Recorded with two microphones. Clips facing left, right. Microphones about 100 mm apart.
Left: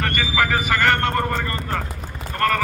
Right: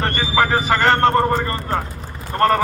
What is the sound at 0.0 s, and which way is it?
Vehicle, 30° right (ahead or behind).